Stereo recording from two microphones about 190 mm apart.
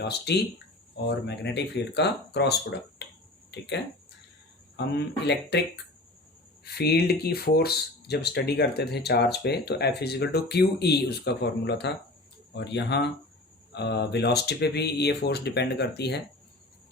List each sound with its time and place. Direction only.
0.0 s speech: 60° left (ahead or behind)
4.9 s speech: 60° left (ahead or behind)